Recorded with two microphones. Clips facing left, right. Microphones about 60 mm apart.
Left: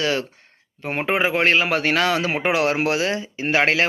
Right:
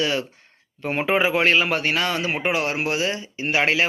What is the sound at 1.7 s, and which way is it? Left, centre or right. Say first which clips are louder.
Speech: left 3 dB; left.